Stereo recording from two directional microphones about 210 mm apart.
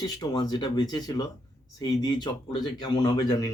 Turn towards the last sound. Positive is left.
turn(degrees=20)  # may be behind; listen again after turning